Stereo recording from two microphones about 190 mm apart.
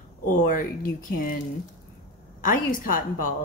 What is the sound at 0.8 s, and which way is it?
Speech, 45° left (ahead or behind).